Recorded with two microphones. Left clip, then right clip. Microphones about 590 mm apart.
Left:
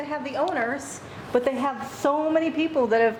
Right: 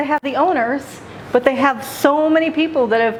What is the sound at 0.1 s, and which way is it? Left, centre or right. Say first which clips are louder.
Speech: right 8 dB; right.